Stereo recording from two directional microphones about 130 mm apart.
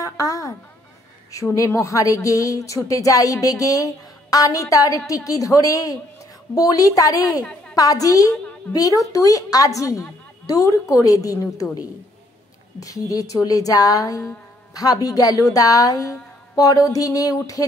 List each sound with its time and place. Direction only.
0.0 s a sound: 25° left (ahead or behind)
1.3 s speech: 25° left (ahead or behind)
12.8 s speech: 25° left (ahead or behind)